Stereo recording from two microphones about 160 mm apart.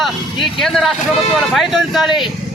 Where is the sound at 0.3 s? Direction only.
30° left (ahead or behind).